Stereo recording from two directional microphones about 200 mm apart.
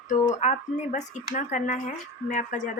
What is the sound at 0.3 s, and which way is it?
Speech, 35° left (ahead or behind).